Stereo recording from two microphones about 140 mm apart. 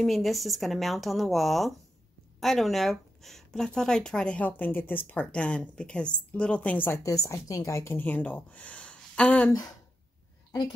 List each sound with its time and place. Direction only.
0.0 s speech: centre (ahead or behind)
9.5 s speech: 25° left (ahead or behind)